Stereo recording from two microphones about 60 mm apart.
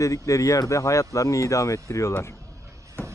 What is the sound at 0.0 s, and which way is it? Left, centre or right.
Speech, left.